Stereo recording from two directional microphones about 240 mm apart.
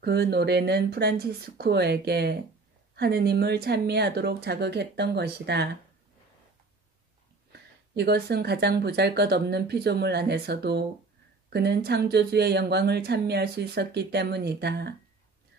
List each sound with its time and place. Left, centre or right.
0.0 s speech: right
7.9 s speech: right